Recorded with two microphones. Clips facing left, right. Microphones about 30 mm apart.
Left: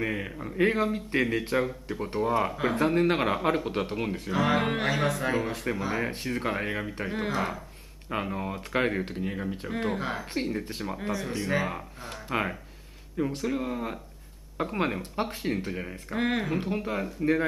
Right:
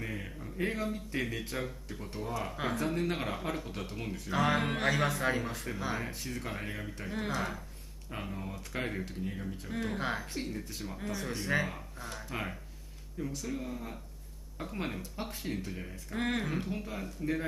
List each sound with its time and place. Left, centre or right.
0.0 s speech: left
4.3 s speech: centre
4.6 s speech: centre
5.4 s speech: left
5.9 s speech: left
8.1 s speech: left
9.9 s speech: centre
10.2 s speech: left
11.1 s speech: centre
11.6 s speech: left
16.2 s speech: centre
16.5 s speech: left